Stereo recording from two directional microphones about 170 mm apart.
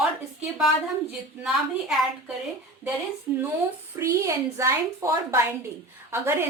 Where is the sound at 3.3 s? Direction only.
15° right (ahead or behind).